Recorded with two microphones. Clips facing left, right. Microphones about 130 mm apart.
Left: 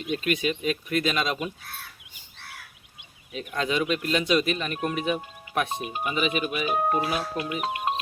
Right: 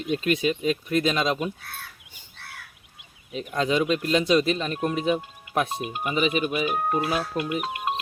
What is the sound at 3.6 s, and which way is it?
Speech, 30° right (ahead or behind).